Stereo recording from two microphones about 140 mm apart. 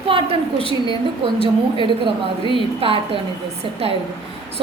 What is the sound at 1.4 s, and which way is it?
A woman's voice, 35° right (ahead or behind).